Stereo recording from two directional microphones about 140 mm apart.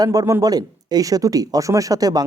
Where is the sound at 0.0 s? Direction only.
25° right (ahead or behind).